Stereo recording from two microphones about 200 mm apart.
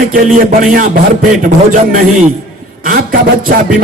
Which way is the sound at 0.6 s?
45° right (ahead or behind).